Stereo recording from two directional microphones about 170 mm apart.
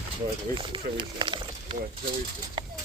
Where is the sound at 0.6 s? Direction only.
30° right (ahead or behind).